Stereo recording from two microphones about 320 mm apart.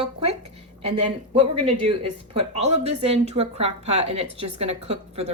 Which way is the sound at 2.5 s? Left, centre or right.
Centre.